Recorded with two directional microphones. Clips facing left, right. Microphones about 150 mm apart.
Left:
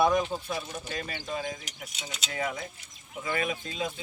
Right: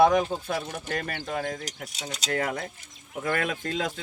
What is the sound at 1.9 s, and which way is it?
Speech, 40° right (ahead or behind).